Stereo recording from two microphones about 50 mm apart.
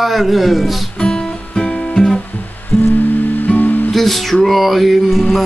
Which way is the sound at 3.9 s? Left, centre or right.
Centre.